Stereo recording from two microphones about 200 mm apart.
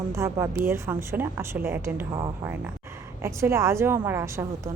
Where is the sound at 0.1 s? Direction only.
15° right (ahead or behind).